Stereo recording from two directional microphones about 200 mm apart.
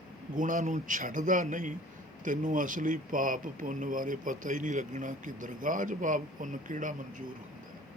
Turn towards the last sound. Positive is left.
turn(degrees=-40)  # may be behind; listen again after turning